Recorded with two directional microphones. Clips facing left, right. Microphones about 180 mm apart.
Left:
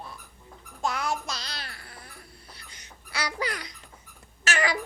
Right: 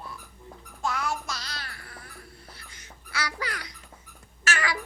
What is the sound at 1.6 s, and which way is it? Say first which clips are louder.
Babbling: even; 25° left (ahead or behind).